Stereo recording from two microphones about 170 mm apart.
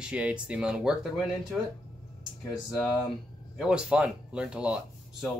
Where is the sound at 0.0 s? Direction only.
5° right (ahead or behind).